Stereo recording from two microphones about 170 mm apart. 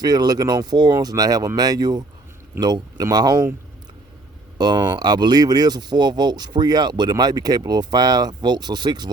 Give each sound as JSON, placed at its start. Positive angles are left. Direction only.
{"t": 0.0, "sound": "speech", "side_deg": -25}
{"t": 4.5, "sound": "speech", "side_deg": -25}